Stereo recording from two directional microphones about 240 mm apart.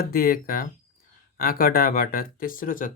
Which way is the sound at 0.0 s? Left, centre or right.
Left.